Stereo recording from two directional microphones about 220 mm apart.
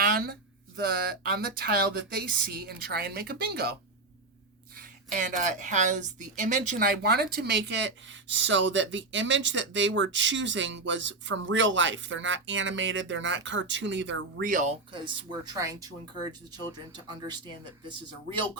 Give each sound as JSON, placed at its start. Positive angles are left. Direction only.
{"t": 0.0, "sound": "a sound", "side_deg": -40}
{"t": 0.8, "sound": "a woman's voice", "side_deg": -45}
{"t": 4.8, "sound": "a woman's voice", "side_deg": -35}
{"t": 14.4, "sound": "speech", "side_deg": -35}
{"t": 14.9, "sound": "speech", "side_deg": -20}